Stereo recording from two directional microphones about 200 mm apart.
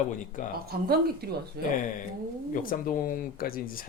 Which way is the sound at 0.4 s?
40° left (ahead or behind).